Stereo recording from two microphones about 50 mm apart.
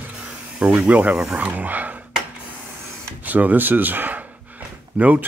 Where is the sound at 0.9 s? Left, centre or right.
Right.